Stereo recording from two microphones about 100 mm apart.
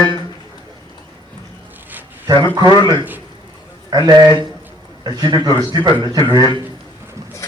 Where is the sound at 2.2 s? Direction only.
45° right (ahead or behind).